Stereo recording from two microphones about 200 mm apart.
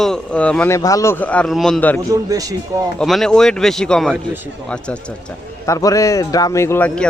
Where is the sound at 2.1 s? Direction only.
15° right (ahead or behind).